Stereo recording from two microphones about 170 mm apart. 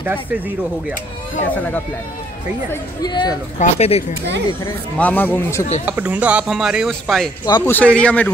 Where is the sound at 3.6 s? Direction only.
35° left (ahead or behind).